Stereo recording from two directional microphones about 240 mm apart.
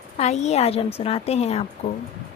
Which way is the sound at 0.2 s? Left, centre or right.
Left.